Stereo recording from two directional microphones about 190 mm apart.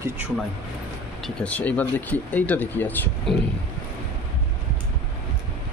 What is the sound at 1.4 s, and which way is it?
Speech, 10° left (ahead or behind).